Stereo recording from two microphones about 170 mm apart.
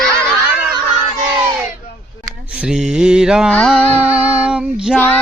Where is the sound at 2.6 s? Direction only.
5° right (ahead or behind).